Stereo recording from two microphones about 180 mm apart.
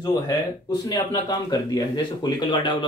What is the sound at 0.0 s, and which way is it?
Speech, 20° left (ahead or behind).